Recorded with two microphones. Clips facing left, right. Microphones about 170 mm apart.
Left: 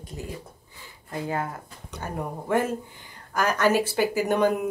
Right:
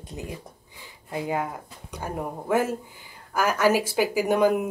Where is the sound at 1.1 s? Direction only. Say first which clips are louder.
Right 2 dB; 15° right (ahead or behind).